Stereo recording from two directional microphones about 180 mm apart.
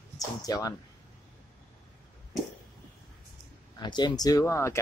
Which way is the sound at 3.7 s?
25° left (ahead or behind).